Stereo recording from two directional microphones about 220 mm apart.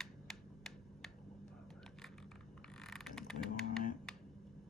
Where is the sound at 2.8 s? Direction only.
Centre (ahead or behind).